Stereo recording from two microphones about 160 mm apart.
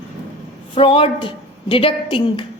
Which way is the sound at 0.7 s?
35° left (ahead or behind).